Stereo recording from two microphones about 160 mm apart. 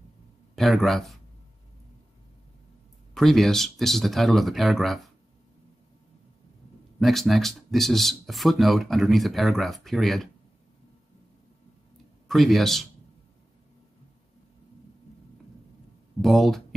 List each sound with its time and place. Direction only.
0.6 s speech: centre (ahead or behind)
3.2 s speech: centre (ahead or behind)
7.0 s speech: centre (ahead or behind)
12.3 s speech: centre (ahead or behind)
16.2 s speech: centre (ahead or behind)